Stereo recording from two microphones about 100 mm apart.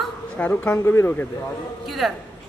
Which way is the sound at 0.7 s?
25° left (ahead or behind).